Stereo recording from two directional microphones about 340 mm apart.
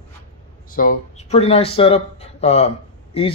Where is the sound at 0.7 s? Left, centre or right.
Left.